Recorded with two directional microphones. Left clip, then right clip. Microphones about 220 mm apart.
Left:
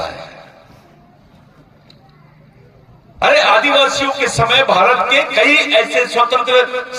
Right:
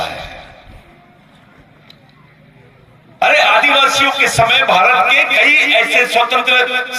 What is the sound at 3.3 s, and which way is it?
Speech, 5° left (ahead or behind).